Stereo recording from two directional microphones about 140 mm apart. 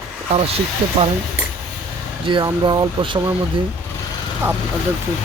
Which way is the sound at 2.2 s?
35° right (ahead or behind).